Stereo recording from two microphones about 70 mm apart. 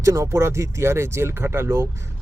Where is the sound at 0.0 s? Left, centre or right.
Right.